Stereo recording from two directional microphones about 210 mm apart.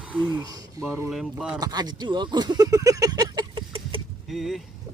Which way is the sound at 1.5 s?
20° right (ahead or behind).